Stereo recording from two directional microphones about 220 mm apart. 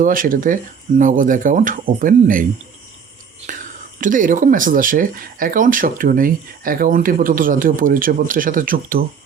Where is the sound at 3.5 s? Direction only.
40° right (ahead or behind).